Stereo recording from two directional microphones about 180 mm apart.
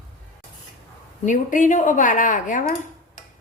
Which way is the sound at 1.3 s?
45° left (ahead or behind).